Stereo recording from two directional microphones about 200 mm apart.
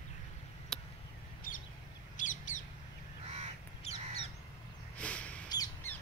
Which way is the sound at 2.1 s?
40° left (ahead or behind).